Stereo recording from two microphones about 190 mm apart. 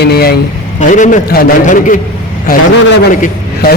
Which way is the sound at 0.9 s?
40° left (ahead or behind).